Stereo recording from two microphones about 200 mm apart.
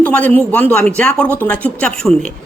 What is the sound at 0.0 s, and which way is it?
A woman's voice, 5° left (ahead or behind).